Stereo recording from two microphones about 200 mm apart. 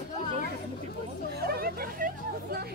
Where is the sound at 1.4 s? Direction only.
50° right (ahead or behind).